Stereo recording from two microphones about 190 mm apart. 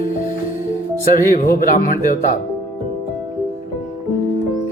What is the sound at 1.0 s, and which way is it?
Speech, 50° left (ahead or behind).